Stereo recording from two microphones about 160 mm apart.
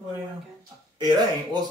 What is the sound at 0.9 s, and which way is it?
Speech, 25° right (ahead or behind).